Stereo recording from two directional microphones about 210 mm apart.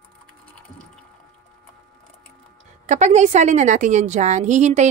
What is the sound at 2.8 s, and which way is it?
Speech, 35° right (ahead or behind).